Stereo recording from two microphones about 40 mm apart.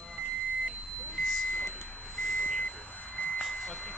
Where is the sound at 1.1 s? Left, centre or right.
Centre.